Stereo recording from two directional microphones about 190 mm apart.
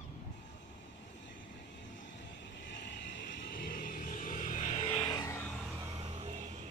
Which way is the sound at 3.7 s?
50° left (ahead or behind).